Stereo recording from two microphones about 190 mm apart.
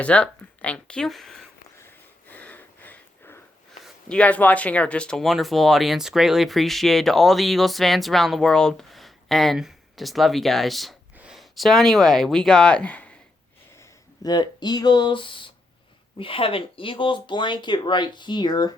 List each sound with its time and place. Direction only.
0.0 s speech: 5° left (ahead or behind)
1.8 s a sound: 10° left (ahead or behind)
3.8 s speech: centre (ahead or behind)
14.2 s speech: 20° left (ahead or behind)